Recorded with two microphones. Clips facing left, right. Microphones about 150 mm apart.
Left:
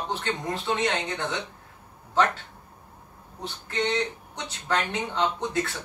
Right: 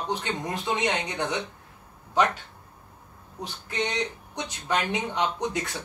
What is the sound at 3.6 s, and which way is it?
Speech, 15° right (ahead or behind).